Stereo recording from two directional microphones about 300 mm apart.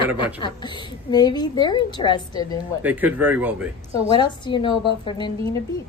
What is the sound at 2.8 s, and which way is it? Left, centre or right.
Speech, centre.